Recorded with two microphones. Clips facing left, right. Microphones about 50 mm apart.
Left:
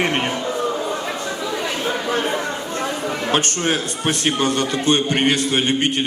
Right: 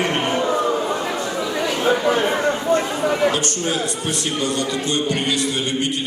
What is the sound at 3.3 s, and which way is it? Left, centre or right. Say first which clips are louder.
A man's voice: left 2 dB; left.